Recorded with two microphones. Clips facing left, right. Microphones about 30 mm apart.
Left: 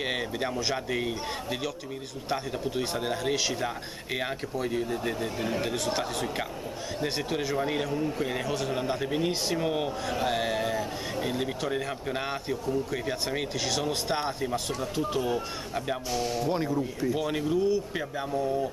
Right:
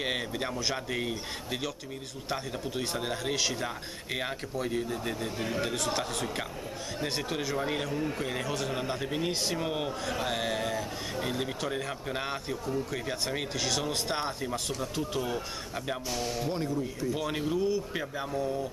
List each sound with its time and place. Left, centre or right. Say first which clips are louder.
0.0 s a man's voice: left 2 dB; centre
16.6 s speech: left 3 dB; centre
17.1 s a man's voice: left 3 dB; centre